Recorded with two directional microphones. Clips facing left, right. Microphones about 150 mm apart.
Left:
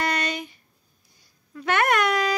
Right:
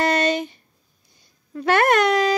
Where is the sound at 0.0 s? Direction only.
30° right (ahead or behind).